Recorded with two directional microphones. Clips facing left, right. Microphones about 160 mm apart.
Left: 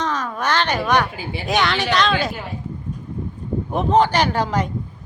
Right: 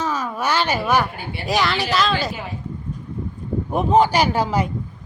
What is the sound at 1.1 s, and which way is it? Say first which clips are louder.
Speech: left 2 dB; 90° left.